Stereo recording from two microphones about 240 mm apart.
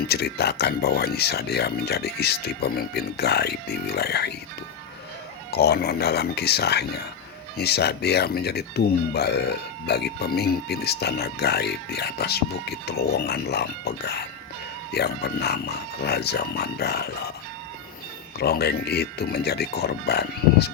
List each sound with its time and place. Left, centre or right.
0.1 s speech: left
5.5 s speech: left
18.3 s speech: left